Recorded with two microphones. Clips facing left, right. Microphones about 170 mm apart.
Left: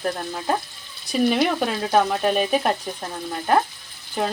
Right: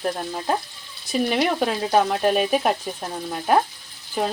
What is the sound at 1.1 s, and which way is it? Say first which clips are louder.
Speech: left 2 dB; centre (ahead or behind).